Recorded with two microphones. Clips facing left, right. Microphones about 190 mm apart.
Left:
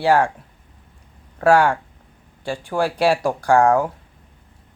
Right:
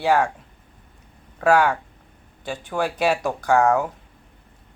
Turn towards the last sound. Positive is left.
turn(degrees=10)  # may be behind; listen again after turning